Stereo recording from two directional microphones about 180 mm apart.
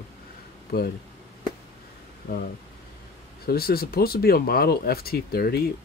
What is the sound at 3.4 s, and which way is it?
Speech, 60° left (ahead or behind).